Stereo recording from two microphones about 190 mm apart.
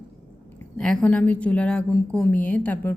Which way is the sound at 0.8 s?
5° left (ahead or behind).